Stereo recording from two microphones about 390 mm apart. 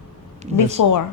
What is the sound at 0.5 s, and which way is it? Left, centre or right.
Speech, centre.